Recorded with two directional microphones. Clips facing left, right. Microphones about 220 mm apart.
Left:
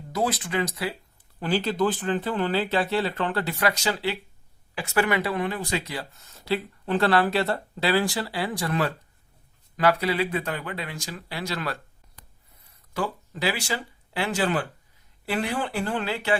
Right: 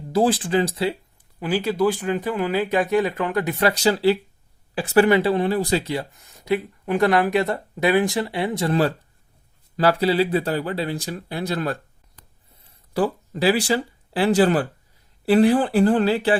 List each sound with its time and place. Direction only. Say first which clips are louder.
0.1 s speech: right 8 dB; 30° right (ahead or behind)
1.4 s speech: right 3 dB; 10° right (ahead or behind); by 11.1 s 35° right (ahead or behind)
11.1 s speech: right 6 dB; 50° right (ahead or behind)
12.6 s speech: right 7 dB; 35° right (ahead or behind)